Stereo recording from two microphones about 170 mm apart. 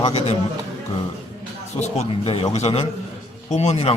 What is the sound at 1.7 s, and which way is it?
Speech, 40° left (ahead or behind).